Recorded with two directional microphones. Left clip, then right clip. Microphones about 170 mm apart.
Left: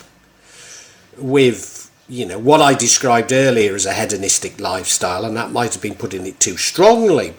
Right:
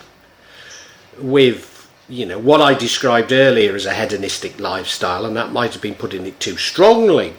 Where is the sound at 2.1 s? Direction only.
40° left (ahead or behind).